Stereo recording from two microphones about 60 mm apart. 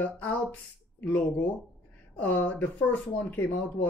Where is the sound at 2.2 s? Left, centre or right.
Left.